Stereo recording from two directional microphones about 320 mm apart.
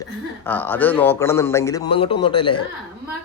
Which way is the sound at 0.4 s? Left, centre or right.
Centre.